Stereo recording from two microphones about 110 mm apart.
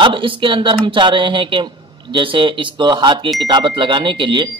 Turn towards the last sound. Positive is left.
turn(degrees=-45)  # may be behind; listen again after turning